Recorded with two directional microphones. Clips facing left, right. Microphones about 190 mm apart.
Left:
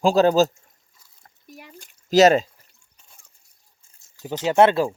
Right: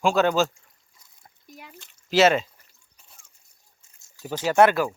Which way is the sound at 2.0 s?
40° left (ahead or behind).